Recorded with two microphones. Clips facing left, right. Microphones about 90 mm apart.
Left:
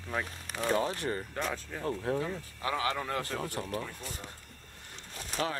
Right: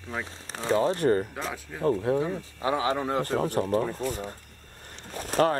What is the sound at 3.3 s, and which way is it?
Speech, 40° right (ahead or behind).